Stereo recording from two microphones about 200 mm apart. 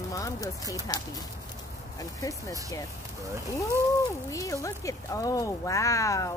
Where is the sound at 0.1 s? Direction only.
15° left (ahead or behind).